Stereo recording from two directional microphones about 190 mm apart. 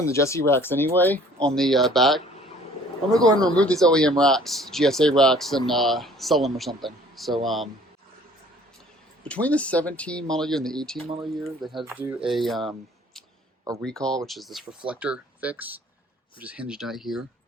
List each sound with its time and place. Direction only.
0.0 s speech: 15° left (ahead or behind)
3.2 s speech: 20° right (ahead or behind)
3.6 s speech: 5° left (ahead or behind)
9.2 s speech: 5° left (ahead or behind)
13.8 s speech: 5° left (ahead or behind)